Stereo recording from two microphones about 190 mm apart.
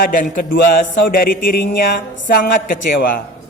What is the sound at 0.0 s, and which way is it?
A man's voice, 45° left (ahead or behind).